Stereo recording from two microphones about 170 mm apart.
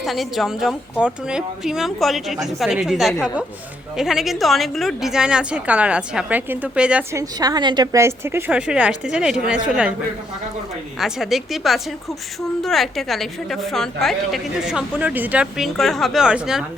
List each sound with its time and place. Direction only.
0.0 s a woman's voice: centre (ahead or behind)
7.1 s a woman's voice: 20° right (ahead or behind); by 9.6 s 5° right (ahead or behind)
11.0 s a woman's voice: centre (ahead or behind)